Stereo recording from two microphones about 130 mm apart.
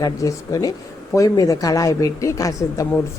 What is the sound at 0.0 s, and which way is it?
Speech, 25° left (ahead or behind).